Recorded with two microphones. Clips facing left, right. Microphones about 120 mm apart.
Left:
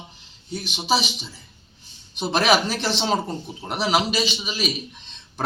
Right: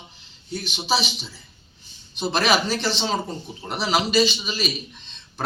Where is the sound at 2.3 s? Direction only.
10° left (ahead or behind).